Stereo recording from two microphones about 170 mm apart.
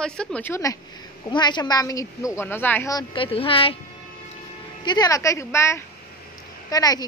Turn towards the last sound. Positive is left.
turn(degrees=20)  # may be behind; listen again after turning